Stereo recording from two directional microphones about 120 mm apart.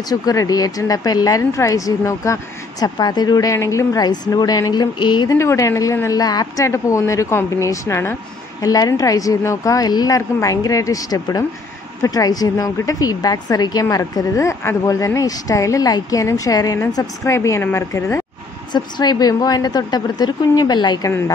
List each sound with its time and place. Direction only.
0.1 s speech: 30° left (ahead or behind)
5.4 s a woman's voice: 25° left (ahead or behind)
18.7 s speech: 35° left (ahead or behind)